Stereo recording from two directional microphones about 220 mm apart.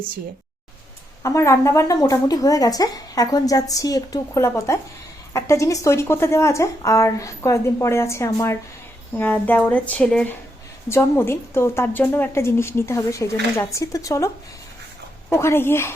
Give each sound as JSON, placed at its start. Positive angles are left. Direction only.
{"t": 1.2, "sound": "a woman's voice", "side_deg": 15}
{"t": 15.3, "sound": "a woman's voice", "side_deg": 10}